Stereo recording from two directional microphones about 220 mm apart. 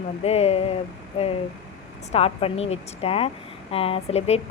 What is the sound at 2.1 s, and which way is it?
A woman's voice, 25° left (ahead or behind).